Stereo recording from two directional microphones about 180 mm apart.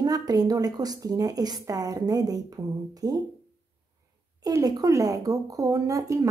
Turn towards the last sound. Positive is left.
turn(degrees=-20)  # may be behind; listen again after turning